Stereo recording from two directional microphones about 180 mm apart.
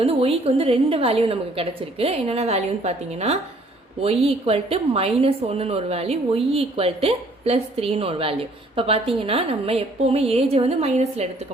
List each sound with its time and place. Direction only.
0.0 s a woman's voice: 35° right (ahead or behind)